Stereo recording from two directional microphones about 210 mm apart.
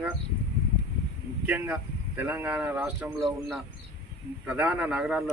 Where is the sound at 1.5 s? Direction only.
10° right (ahead or behind).